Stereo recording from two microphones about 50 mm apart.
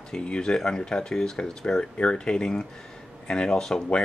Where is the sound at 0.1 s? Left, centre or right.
Centre.